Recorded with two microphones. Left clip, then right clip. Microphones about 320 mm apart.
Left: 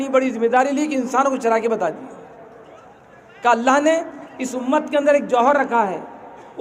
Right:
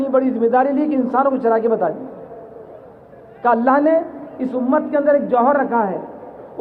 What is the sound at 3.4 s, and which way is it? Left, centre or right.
A man's voice, centre.